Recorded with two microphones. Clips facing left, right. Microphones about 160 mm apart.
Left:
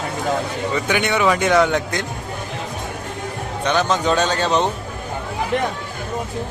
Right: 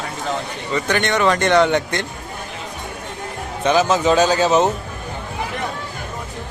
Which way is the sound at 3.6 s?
5° right (ahead or behind).